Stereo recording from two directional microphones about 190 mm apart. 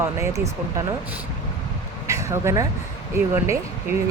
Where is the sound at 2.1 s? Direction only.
15° right (ahead or behind).